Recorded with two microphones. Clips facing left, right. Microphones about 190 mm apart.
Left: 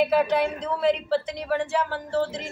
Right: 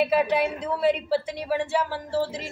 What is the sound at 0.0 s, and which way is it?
A woman's voice, 5° right (ahead or behind).